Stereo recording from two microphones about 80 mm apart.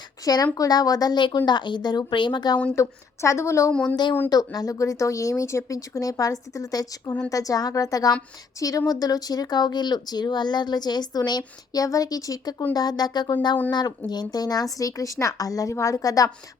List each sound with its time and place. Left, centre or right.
0.5 s speech: left
1.5 s speech: left
2.7 s a woman's voice: left
3.7 s speech: centre
4.3 s speech: left